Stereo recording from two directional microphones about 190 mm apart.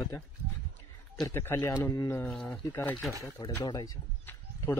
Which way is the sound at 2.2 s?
Centre (ahead or behind).